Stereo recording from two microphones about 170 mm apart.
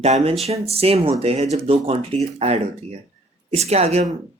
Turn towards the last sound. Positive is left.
turn(degrees=-40)  # may be behind; listen again after turning